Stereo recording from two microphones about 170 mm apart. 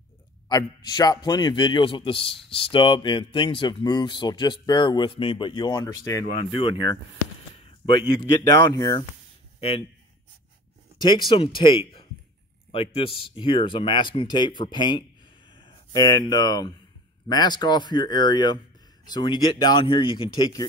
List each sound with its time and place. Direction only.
0.5 s a man's voice: 25° left (ahead or behind)
7.9 s a man's voice: 20° left (ahead or behind)
9.6 s a man's voice: 35° left (ahead or behind)
11.0 s a man's voice: 25° left (ahead or behind)